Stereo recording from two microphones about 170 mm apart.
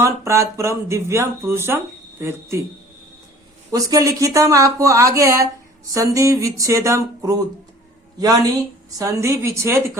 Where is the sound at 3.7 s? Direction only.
20° right (ahead or behind).